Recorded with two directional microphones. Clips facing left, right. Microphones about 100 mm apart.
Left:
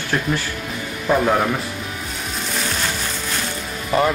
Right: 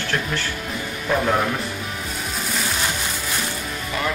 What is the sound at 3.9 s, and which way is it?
Speech, 35° left (ahead or behind).